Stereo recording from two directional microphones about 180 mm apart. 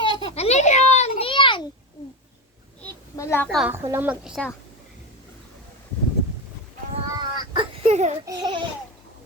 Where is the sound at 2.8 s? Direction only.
15° left (ahead or behind).